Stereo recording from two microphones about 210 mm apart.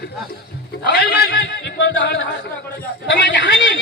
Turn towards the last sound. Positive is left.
turn(degrees=60)  # may be behind; listen again after turning